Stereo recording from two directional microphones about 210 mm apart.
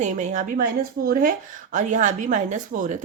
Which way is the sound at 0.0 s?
35° right (ahead or behind).